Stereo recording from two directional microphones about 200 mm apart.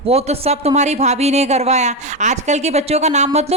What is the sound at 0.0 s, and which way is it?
A woman's voice, 30° right (ahead or behind).